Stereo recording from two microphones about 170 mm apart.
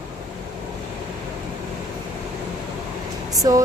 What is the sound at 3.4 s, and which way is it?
Speech, 20° right (ahead or behind).